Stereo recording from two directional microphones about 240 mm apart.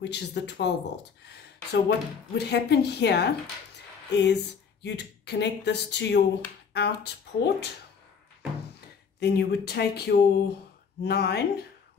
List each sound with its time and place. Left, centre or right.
0.0 s speech: left
9.2 s speech: left